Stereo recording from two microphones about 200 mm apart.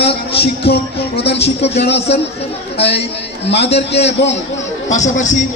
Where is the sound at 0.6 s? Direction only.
55° left (ahead or behind).